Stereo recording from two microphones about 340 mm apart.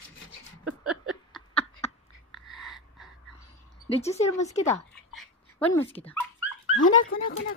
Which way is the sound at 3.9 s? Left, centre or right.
Centre.